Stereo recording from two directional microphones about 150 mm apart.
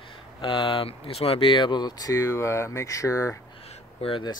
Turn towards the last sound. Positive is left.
turn(degrees=35)  # may be behind; listen again after turning